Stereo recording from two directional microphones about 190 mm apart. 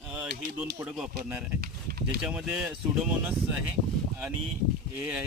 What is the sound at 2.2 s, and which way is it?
Speech, 5° right (ahead or behind).